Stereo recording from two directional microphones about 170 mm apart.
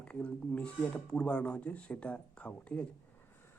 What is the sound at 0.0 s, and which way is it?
Speech, 5° left (ahead or behind).